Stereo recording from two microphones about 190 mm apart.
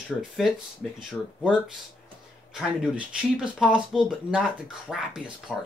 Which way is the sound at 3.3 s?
5° right (ahead or behind).